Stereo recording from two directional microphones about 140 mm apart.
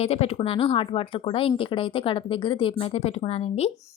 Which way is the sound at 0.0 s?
45° left (ahead or behind).